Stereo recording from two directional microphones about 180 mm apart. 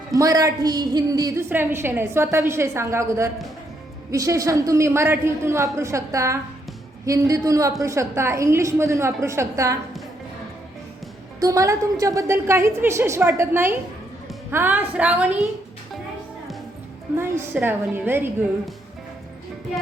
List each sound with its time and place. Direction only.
0.1 s a woman's voice: 20° right (ahead or behind)
11.3 s a woman's voice: 20° right (ahead or behind)
17.2 s a woman's voice: 15° right (ahead or behind)